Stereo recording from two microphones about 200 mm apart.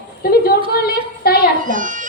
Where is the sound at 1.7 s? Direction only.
40° right (ahead or behind).